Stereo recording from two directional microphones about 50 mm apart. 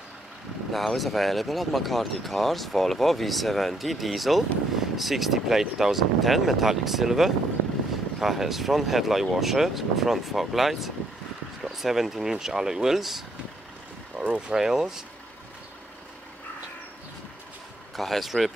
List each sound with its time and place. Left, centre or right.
0.7 s speech: centre
14.2 s vehicle: centre
14.5 s speech: centre
17.9 s speech: centre